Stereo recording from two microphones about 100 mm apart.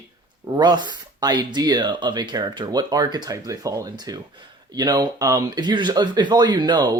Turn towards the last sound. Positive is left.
turn(degrees=-45)  # may be behind; listen again after turning